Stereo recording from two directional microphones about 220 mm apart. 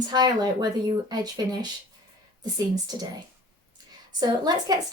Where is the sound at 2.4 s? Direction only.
20° right (ahead or behind).